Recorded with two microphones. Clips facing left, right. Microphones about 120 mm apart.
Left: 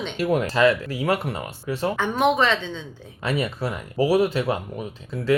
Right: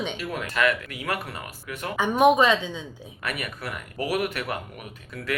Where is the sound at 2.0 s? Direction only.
15° right (ahead or behind).